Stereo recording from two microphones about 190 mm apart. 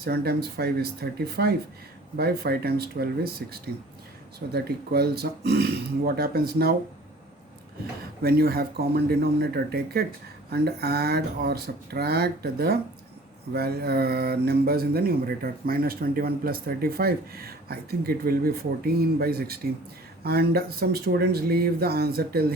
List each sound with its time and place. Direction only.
0.0 s speech: 55° right (ahead or behind)
8.2 s speech: 55° right (ahead or behind)